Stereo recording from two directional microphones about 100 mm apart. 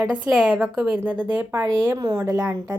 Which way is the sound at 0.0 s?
10° right (ahead or behind).